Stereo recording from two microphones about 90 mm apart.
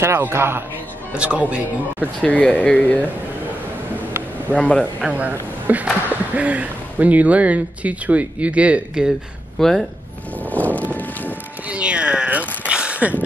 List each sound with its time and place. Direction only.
0.0 s speech: 30° right (ahead or behind)
1.1 s speech: 15° right (ahead or behind)
2.2 s speech: 15° left (ahead or behind)
4.5 s speech: 15° left (ahead or behind)
5.1 s a woman's voice: 15° right (ahead or behind)
9.6 s speech: 5° left (ahead or behind)
10.5 s vehicle: 15° left (ahead or behind)
11.6 s speech: 15° right (ahead or behind)